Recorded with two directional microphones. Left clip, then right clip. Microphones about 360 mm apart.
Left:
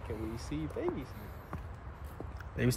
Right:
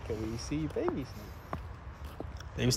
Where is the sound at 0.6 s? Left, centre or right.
Right.